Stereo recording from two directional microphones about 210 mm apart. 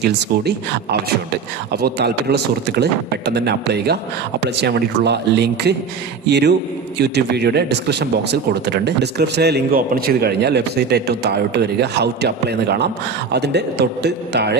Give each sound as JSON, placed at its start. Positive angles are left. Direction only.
{"t": 0.0, "sound": "speech", "side_deg": -50}